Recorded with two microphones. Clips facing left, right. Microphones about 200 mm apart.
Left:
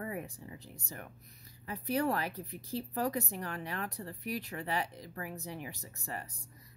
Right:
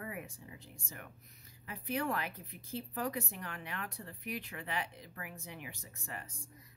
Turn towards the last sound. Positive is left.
turn(degrees=35)  # may be behind; listen again after turning